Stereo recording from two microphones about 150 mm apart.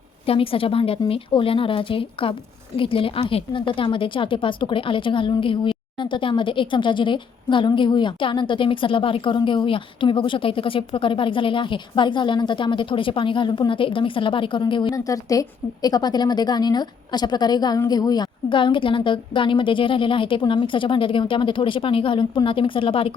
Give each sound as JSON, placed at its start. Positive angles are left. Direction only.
{"t": 0.3, "sound": "a woman's voice", "side_deg": 40}